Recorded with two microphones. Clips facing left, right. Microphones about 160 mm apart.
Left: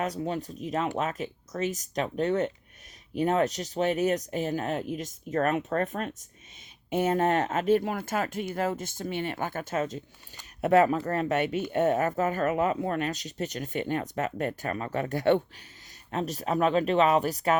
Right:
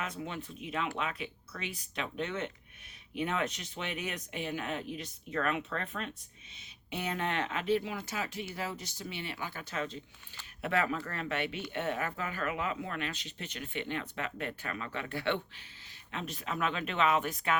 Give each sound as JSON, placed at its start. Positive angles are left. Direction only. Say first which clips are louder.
{"t": 0.0, "sound": "speech", "louder": "left 9 dB", "side_deg": 40}